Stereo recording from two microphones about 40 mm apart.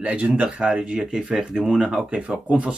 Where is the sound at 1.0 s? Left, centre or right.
Centre.